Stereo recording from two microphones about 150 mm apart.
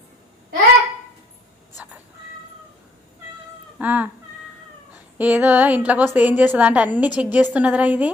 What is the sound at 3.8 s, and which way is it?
Speech, 10° right (ahead or behind).